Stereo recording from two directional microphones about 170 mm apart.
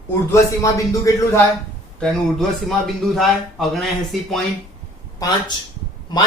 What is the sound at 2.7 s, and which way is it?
Speech, centre (ahead or behind).